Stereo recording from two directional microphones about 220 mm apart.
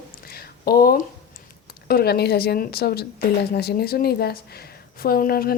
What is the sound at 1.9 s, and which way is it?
A woman's voice, 45° left (ahead or behind).